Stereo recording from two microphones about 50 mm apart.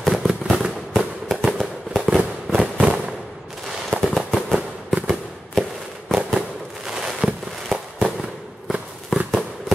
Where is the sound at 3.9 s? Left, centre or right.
Right.